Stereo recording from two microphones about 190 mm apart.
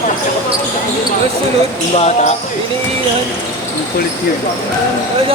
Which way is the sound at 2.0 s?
35° left (ahead or behind).